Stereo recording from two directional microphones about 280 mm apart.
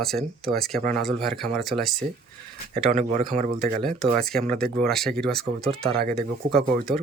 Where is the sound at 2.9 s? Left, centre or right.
Right.